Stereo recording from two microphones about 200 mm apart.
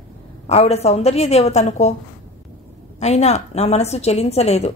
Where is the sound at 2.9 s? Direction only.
35° left (ahead or behind).